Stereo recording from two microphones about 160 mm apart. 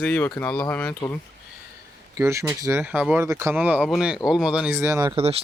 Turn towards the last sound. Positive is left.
turn(degrees=-40)  # may be behind; listen again after turning